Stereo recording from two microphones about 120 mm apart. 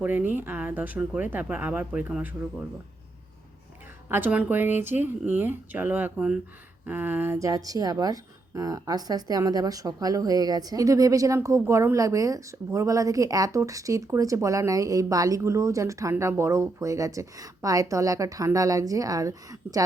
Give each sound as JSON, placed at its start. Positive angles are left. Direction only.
{"t": 0.0, "sound": "speech", "side_deg": -15}
{"t": 4.1, "sound": "a woman's voice", "side_deg": -15}